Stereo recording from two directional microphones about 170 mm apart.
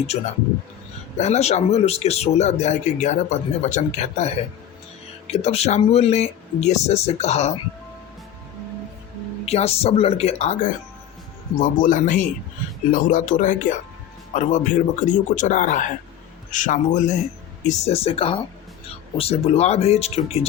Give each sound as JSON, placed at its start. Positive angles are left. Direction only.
{"t": 1.2, "sound": "speech", "side_deg": 40}
{"t": 5.3, "sound": "speech", "side_deg": 40}
{"t": 9.5, "sound": "speech", "side_deg": 35}
{"t": 11.6, "sound": "a man's voice", "side_deg": 50}